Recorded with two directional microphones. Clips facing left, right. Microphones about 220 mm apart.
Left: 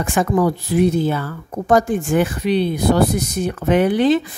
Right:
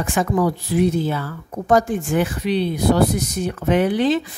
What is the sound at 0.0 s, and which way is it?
Speech, 50° left (ahead or behind).